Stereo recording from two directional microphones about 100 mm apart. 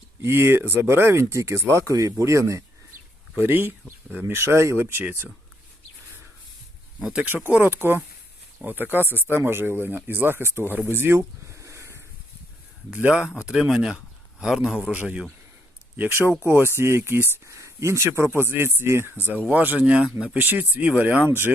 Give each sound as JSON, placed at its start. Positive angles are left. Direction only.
{"t": 0.2, "sound": "speech", "side_deg": -25}
{"t": 7.0, "sound": "speech", "side_deg": -10}
{"t": 10.8, "sound": "a sound", "side_deg": -25}
{"t": 12.9, "sound": "speech", "side_deg": -10}
{"t": 16.0, "sound": "speech", "side_deg": -20}